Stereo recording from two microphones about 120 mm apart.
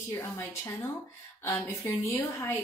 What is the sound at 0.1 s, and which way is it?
Speech, 20° left (ahead or behind).